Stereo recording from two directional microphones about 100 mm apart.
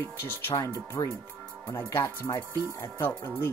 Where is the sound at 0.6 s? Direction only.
30° left (ahead or behind).